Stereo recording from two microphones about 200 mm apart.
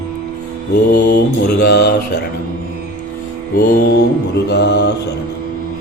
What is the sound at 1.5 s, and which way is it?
Speech, 55° left (ahead or behind).